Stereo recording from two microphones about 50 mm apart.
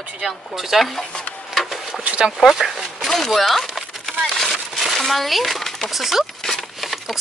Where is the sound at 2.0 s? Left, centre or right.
Right.